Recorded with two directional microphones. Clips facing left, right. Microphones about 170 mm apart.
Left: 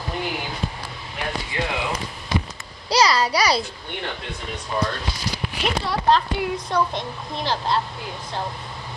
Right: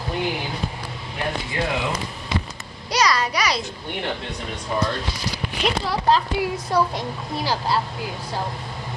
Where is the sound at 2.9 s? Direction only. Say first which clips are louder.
Left 2 dB; 30° left (ahead or behind).